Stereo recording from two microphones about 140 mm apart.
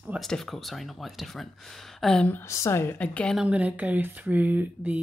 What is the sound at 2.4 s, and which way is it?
Speech, 20° left (ahead or behind).